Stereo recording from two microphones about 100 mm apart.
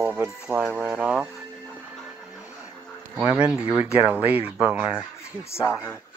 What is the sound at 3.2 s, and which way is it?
Speech, 15° right (ahead or behind).